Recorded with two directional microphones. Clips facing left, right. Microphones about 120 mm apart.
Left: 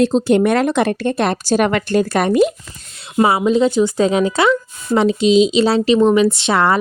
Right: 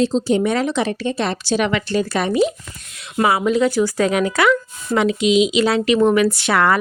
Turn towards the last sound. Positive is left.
turn(degrees=25)  # may be behind; listen again after turning